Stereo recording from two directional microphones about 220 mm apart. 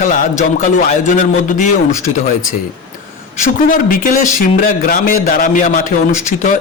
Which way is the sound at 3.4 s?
40° left (ahead or behind).